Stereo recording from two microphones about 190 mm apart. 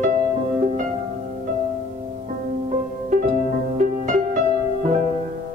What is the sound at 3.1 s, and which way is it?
Music, 45° right (ahead or behind).